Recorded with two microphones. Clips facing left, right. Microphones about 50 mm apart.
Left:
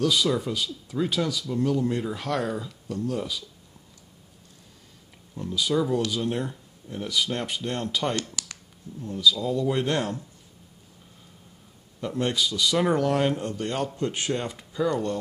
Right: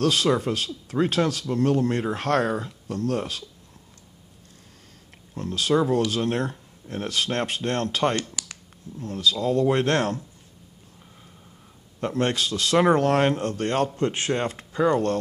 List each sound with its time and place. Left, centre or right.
0.0 s speech: right
5.3 s speech: right
12.0 s speech: right
13.9 s speech: right